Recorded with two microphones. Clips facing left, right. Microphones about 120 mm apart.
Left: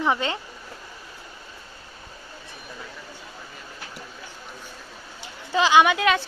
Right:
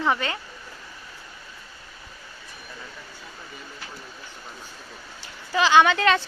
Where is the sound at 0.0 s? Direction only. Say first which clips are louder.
Left 1 dB; 20° left (ahead or behind).